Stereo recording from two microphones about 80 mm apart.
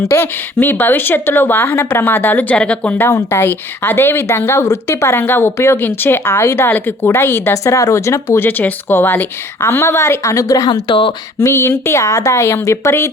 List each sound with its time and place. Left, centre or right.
0.1 s speech: left
3.0 s a woman's voice: left
8.4 s a woman's voice: left
10.8 s speech: left
11.3 s a woman's voice: left